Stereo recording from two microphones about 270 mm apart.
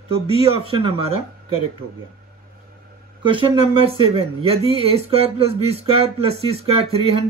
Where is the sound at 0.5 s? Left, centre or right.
Centre.